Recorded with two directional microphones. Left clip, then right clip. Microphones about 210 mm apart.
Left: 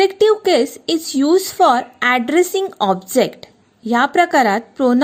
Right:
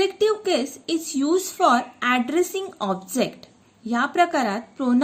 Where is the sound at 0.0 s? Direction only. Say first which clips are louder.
Left 8 dB; 35° left (ahead or behind).